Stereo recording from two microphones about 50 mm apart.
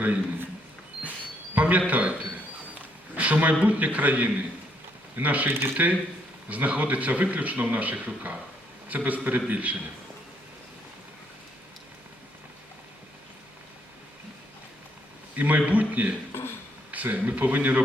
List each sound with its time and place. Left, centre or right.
0.0 s a man's voice: right
1.5 s a sound: right
1.9 s a man's voice: right
3.2 s a man's voice: right
5.5 s speech: right
5.7 s a man's voice: right
15.4 s a man's voice: right